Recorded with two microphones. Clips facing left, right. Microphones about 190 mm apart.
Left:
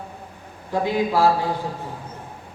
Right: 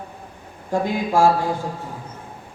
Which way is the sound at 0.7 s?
45° right (ahead or behind).